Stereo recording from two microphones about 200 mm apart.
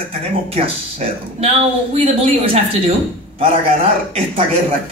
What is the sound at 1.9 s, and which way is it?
A man's voice, 30° right (ahead or behind).